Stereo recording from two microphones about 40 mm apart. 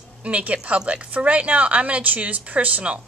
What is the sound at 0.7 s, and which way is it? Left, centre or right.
Speech, right.